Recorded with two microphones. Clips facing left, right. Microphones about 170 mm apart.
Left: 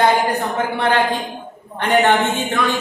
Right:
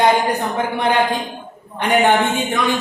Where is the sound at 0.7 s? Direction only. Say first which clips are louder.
Even; 15° right (ahead or behind).